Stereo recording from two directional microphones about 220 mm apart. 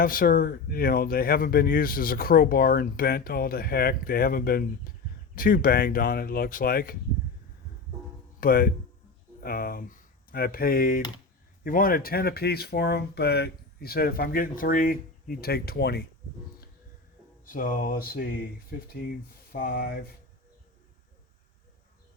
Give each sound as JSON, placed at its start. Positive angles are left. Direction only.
{"t": 0.0, "sound": "speech", "side_deg": 40}
{"t": 8.4, "sound": "speech", "side_deg": 40}
{"t": 17.4, "sound": "speech", "side_deg": 40}